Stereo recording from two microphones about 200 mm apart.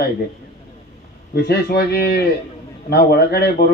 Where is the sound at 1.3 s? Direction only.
55° left (ahead or behind).